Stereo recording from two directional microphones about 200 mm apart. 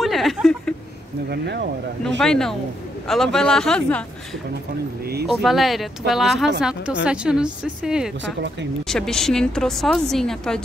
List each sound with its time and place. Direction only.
0.0 s speech: centre (ahead or behind)
1.3 s speech: 55° right (ahead or behind)
2.0 s a woman's voice: 5° left (ahead or behind)
5.2 s a woman's voice: centre (ahead or behind)